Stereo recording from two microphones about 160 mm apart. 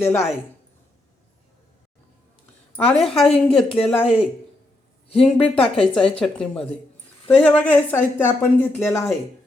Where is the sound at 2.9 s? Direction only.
Centre (ahead or behind).